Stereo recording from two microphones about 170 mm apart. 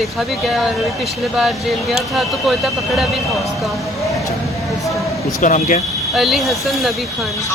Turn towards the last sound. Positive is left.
turn(degrees=0)  # may be behind; listen again after turning